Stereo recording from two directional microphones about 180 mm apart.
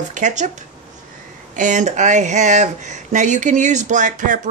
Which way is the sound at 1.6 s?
45° right (ahead or behind).